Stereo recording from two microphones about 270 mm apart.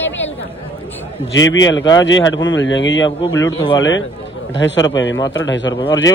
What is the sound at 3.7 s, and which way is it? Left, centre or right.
Speech, left.